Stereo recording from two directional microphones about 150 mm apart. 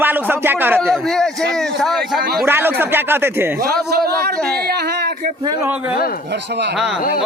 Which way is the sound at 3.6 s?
90° right.